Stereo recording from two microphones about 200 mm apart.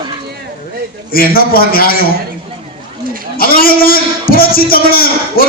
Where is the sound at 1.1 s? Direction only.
50° left (ahead or behind).